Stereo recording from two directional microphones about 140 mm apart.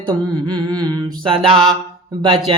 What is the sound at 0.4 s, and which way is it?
Speech, 35° right (ahead or behind).